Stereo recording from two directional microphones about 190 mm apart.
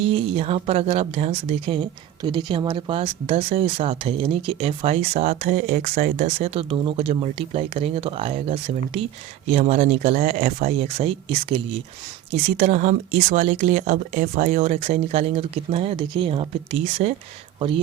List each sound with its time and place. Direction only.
0.0 s speech: 30° right (ahead or behind)